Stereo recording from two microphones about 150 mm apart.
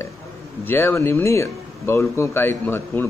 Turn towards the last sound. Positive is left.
turn(degrees=15)  # may be behind; listen again after turning